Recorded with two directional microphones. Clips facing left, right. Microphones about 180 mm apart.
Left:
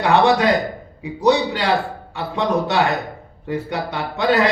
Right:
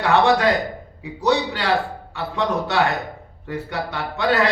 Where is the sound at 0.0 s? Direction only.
15° left (ahead or behind).